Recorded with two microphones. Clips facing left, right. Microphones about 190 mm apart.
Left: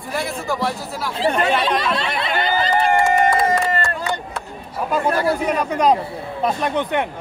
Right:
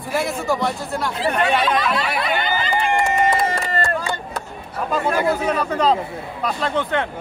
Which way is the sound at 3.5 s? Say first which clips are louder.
Left 3 dB; 40° right (ahead or behind).